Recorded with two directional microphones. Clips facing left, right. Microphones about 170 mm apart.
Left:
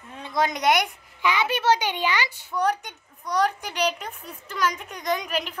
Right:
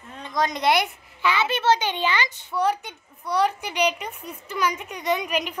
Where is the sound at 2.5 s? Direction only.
5° right (ahead or behind).